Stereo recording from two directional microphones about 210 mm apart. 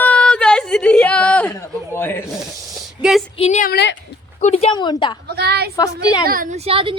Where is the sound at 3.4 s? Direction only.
30° left (ahead or behind).